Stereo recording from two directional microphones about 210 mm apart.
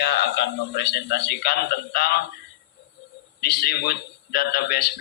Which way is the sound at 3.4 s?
50° left (ahead or behind).